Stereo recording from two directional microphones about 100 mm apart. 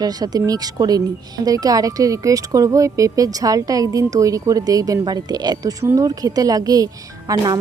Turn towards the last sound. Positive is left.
turn(degrees=-45)  # may be behind; listen again after turning